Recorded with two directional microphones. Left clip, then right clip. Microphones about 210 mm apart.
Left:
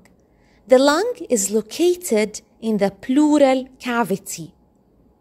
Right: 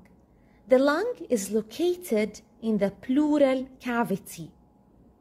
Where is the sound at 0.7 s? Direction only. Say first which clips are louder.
Left 7 dB; 30° left (ahead or behind).